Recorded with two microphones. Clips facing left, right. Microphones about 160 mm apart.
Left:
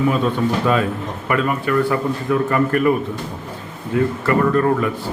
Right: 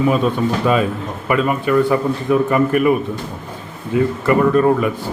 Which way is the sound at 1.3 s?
20° right (ahead or behind).